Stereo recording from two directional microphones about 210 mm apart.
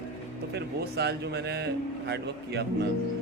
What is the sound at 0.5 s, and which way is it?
A man's voice, 50° right (ahead or behind).